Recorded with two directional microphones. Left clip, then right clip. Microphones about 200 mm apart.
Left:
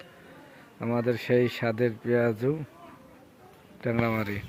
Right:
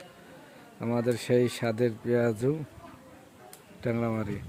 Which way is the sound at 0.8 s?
10° right (ahead or behind).